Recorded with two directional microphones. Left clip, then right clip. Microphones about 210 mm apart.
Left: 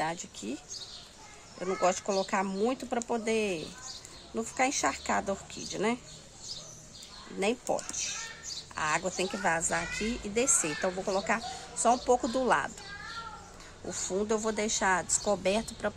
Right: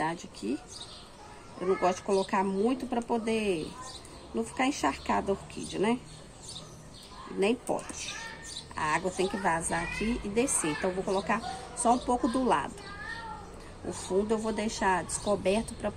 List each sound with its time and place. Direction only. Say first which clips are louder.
0.0 s speech: right 1 dB; 45° left (ahead or behind)
1.6 s speech: right 1 dB; 45° left (ahead or behind)
7.3 s speech: right 1 dB; 45° left (ahead or behind)
14.0 s speech: right 1 dB; 45° left (ahead or behind)